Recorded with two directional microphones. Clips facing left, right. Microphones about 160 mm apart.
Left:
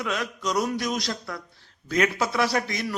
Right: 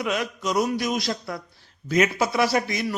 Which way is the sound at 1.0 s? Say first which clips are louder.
Right 3 dB; 20° right (ahead or behind).